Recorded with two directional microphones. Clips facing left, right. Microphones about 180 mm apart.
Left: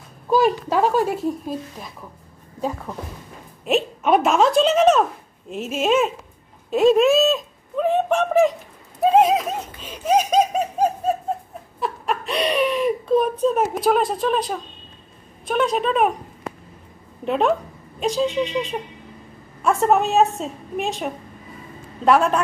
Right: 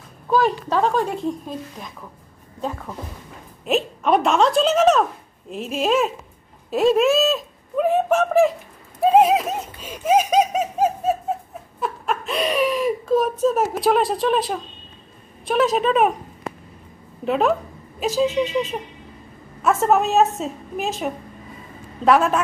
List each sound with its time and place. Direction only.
0.3 s speech: 10° left (ahead or behind)
2.6 s a woman's voice: 5° left (ahead or behind)
9.0 s a sound: 5° right (ahead or behind)
10.3 s bird: 5° right (ahead or behind)
11.8 s a child's voice: centre (ahead or behind)
17.2 s a woman's voice: centre (ahead or behind)